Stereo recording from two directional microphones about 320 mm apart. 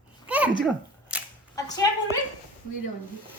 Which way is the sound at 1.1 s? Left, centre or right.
Centre.